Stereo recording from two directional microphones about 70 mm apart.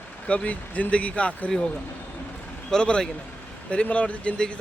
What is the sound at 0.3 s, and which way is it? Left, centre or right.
Speech, centre.